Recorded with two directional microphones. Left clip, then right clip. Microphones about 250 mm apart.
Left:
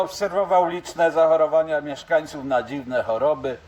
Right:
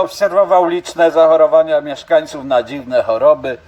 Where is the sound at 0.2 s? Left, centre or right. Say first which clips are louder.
Right 9 dB; right.